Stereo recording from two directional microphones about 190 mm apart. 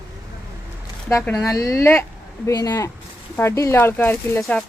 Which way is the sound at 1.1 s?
15° left (ahead or behind).